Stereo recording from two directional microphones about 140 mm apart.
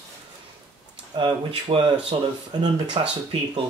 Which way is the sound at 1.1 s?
35° right (ahead or behind).